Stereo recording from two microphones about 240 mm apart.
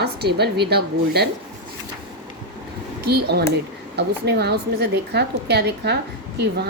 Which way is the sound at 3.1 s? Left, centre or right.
Right.